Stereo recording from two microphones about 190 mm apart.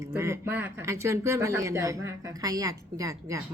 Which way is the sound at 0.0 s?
15° right (ahead or behind).